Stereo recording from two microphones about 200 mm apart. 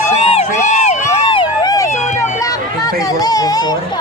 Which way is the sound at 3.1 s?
20° left (ahead or behind).